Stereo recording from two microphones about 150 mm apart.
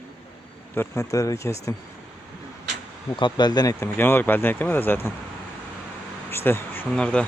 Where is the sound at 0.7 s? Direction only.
15° left (ahead or behind).